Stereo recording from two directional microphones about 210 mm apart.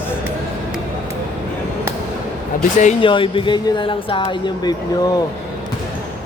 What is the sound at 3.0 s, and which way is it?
Speech, 25° left (ahead or behind).